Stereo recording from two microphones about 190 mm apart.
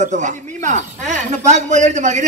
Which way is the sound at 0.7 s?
40° right (ahead or behind).